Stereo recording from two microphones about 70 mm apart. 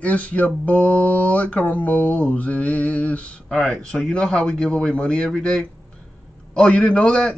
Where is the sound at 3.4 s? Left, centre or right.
Centre.